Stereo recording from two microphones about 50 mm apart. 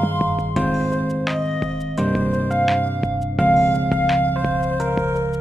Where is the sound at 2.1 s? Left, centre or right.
Centre.